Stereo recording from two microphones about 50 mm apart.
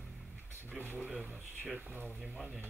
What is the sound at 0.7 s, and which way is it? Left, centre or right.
Speech, left.